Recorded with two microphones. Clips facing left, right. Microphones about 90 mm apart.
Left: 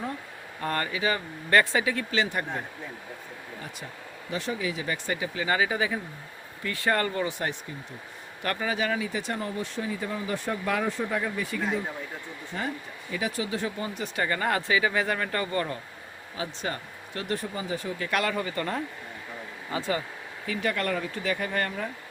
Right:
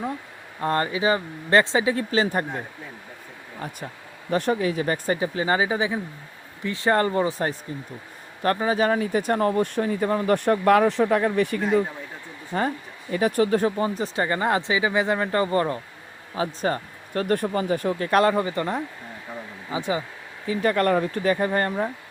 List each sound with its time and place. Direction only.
0.6 s speech: 25° right (ahead or behind)
4.3 s speech: 55° right (ahead or behind)
12.5 s speech: 45° right (ahead or behind)
18.1 s speech: 35° right (ahead or behind); by 20.1 s 15° right (ahead or behind)
20.6 s speech: 40° right (ahead or behind)